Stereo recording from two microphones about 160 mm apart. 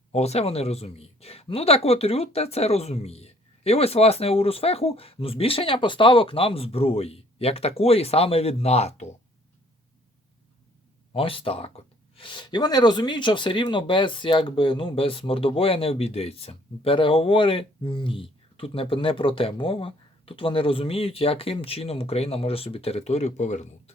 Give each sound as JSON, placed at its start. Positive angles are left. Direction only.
{"t": 0.1, "sound": "speech", "side_deg": 40}
{"t": 11.1, "sound": "speech", "side_deg": 35}